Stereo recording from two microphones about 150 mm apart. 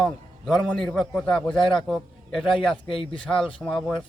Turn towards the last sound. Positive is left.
turn(degrees=5)  # may be behind; listen again after turning